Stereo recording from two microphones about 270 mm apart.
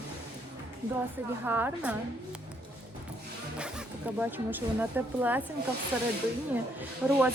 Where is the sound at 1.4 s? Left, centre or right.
Centre.